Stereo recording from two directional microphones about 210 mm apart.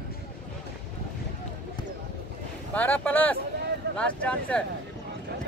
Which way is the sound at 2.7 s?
5° left (ahead or behind).